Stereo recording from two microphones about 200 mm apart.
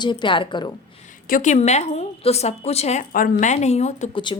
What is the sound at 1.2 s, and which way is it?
A woman's voice, 40° left (ahead or behind).